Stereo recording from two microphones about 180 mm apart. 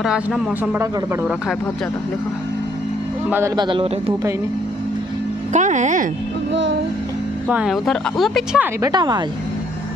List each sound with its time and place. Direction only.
0.0 s a man's voice: 5° right (ahead or behind)
3.3 s speech: 10° right (ahead or behind)
3.5 s speech: 25° right (ahead or behind)
5.5 s speech: 45° right (ahead or behind)
6.5 s music: 75° right (ahead or behind)
7.4 s a man's voice: 5° right (ahead or behind)
8.8 s speech: 25° right (ahead or behind)